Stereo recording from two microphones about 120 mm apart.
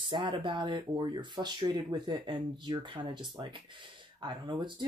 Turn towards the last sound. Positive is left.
turn(degrees=-40)  # may be behind; listen again after turning